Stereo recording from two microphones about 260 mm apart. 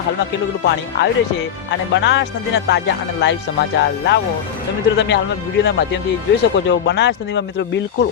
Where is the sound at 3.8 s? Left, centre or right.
Left.